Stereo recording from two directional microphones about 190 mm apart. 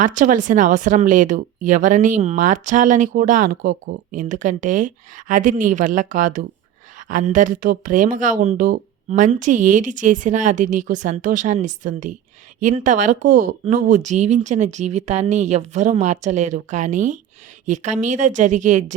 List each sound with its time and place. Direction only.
0.0 s speech: 45° right (ahead or behind)